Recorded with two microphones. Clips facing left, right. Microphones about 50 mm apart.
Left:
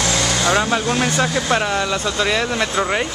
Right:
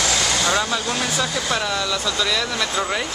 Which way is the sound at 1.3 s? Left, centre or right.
Left.